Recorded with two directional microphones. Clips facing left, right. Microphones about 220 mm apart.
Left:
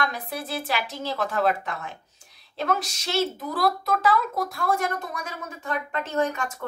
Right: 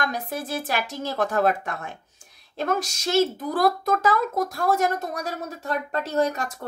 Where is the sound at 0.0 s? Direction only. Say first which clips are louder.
Right 1 dB; 45° right (ahead or behind).